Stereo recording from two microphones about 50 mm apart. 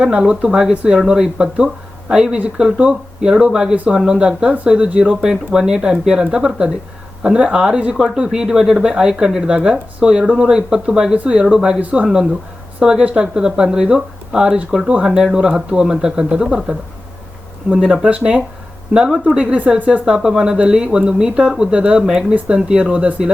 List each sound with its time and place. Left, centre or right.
0.0 s speech: centre
11.8 s speech: right
12.0 s speech: centre
18.9 s speech: centre
19.4 s speech: right
20.1 s speech: centre
22.9 s speech: right